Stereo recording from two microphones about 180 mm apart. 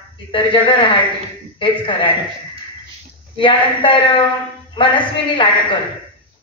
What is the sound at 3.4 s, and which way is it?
Speech, 30° left (ahead or behind).